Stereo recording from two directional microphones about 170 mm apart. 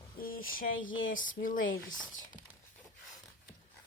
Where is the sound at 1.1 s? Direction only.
50° left (ahead or behind).